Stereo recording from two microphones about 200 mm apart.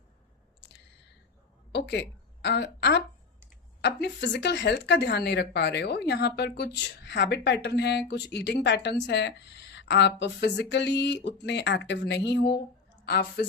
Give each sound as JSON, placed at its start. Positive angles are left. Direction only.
{"t": 1.7, "sound": "a woman's voice", "side_deg": 60}